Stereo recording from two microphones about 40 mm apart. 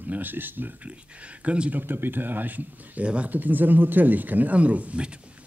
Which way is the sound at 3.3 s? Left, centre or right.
Right.